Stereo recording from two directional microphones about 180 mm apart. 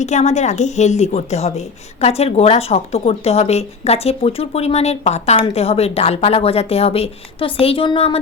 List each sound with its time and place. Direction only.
0.0 s speech: 40° left (ahead or behind)